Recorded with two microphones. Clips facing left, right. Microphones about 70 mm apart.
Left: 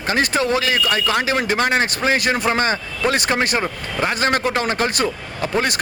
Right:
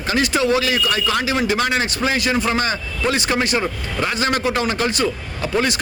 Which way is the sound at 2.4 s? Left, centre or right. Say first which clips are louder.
Left 2 dB; left.